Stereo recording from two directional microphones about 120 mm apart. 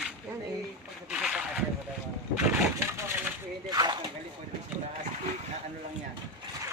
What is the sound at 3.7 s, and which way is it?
Speech, 35° right (ahead or behind).